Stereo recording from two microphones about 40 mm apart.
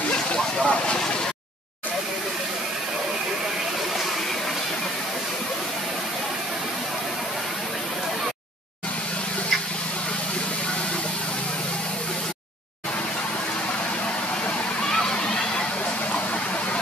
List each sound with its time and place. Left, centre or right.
0.7 s vehicle: left
14.8 s water: left